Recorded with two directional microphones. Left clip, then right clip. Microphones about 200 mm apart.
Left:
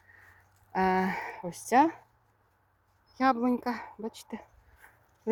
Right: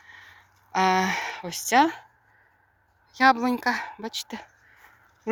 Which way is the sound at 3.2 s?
10° left (ahead or behind).